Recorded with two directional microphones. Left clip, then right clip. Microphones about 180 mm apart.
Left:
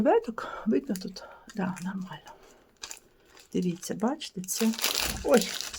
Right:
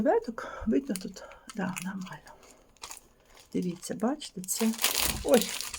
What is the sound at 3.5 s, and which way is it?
Speech, 15° left (ahead or behind).